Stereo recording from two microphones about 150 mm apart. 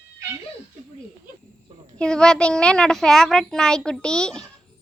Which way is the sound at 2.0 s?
5° left (ahead or behind).